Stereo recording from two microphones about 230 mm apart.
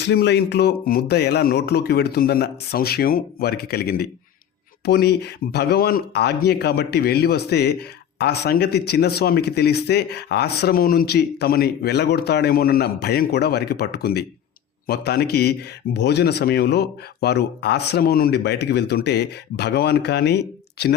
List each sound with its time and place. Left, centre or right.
0.0 s speech: left